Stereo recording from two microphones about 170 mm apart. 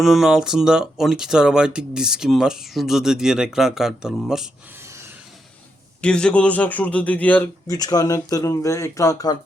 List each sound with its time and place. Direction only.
0.0 s speech: centre (ahead or behind)
6.0 s a man's voice: 5° left (ahead or behind)
7.7 s speech: 20° left (ahead or behind)